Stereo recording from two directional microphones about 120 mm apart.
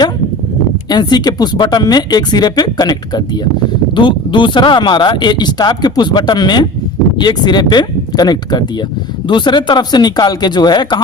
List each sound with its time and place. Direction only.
0.9 s speech: 35° left (ahead or behind)